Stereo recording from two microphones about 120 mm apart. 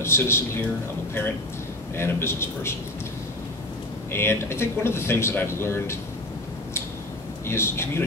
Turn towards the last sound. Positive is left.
turn(degrees=20)  # may be behind; listen again after turning